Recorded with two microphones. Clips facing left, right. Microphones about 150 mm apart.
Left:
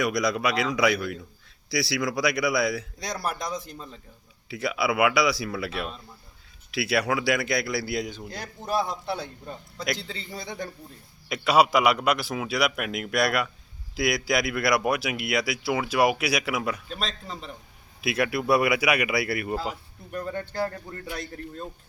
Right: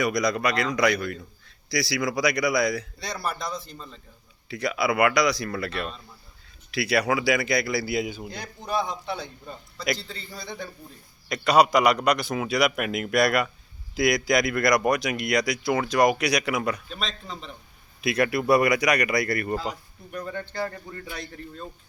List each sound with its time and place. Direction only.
0.0 s speech: centre (ahead or behind)
8.3 s speech: 5° left (ahead or behind)
10.0 s a man's voice: 20° left (ahead or behind)
11.3 s speech: 5° left (ahead or behind)
16.9 s a man's voice: 40° left (ahead or behind)
17.2 s a man's voice: 5° left (ahead or behind)